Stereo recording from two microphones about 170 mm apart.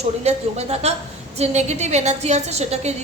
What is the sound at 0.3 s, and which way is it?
A woman's voice, 40° right (ahead or behind).